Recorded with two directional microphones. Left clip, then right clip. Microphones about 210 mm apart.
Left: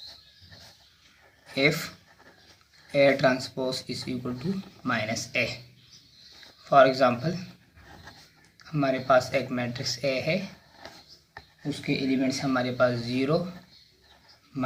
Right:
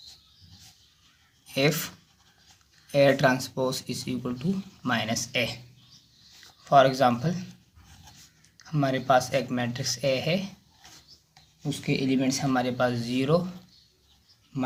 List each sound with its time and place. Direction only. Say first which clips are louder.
1.5 s speech: left 1 dB; 40° right (ahead or behind)
2.9 s speech: even; 35° right (ahead or behind)
6.7 s speech: left 1 dB; 35° right (ahead or behind)
8.5 s speech: left 1 dB; 35° right (ahead or behind)
11.7 s speech: right 1 dB; 45° right (ahead or behind)